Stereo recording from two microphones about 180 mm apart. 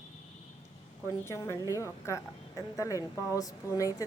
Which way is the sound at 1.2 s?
15° left (ahead or behind).